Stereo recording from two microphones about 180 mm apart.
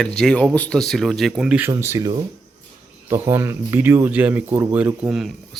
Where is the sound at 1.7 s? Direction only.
15° right (ahead or behind).